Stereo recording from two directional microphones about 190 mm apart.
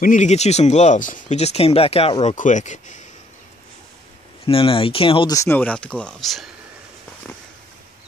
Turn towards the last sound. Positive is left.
turn(degrees=0)  # may be behind; listen again after turning